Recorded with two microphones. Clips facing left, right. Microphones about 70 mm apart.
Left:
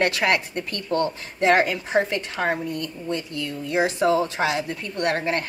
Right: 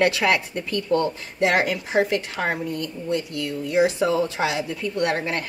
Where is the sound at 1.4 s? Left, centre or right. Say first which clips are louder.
Left 2 dB; left.